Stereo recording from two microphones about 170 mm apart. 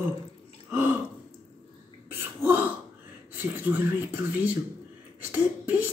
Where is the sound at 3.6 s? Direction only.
10° right (ahead or behind).